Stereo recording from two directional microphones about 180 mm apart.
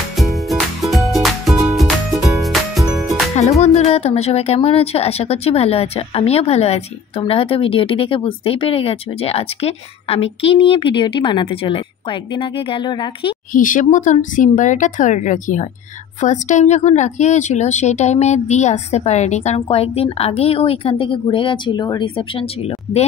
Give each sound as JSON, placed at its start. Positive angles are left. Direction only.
{"t": 0.1, "sound": "music", "side_deg": 0}
{"t": 3.6, "sound": "a woman's voice", "side_deg": 35}
{"t": 13.5, "sound": "a woman's voice", "side_deg": 45}